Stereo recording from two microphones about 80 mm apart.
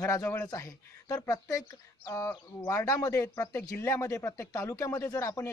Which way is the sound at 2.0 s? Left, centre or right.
Left.